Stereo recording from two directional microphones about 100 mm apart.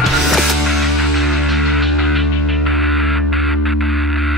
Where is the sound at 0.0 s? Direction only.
Centre (ahead or behind).